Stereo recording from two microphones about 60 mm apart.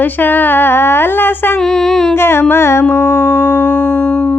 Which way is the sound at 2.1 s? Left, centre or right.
Left.